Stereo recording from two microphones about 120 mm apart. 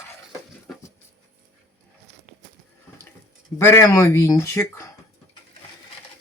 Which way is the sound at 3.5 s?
20° left (ahead or behind).